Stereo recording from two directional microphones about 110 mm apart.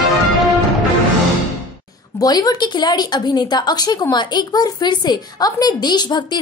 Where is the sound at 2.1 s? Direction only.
35° left (ahead or behind).